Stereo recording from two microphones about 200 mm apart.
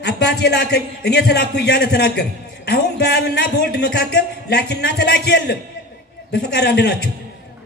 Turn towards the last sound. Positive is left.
turn(degrees=55)  # may be behind; listen again after turning